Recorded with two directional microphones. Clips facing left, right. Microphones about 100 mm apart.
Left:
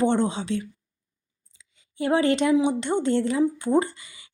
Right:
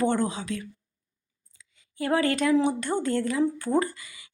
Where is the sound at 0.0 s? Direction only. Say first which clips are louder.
Left 3 dB; 25° left (ahead or behind).